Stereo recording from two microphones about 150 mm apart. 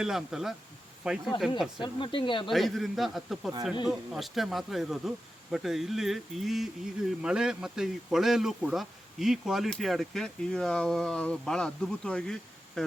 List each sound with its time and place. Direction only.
0.0 s speech: 5° right (ahead or behind)
1.8 s speech: 35° left (ahead or behind)
2.5 s speech: centre (ahead or behind)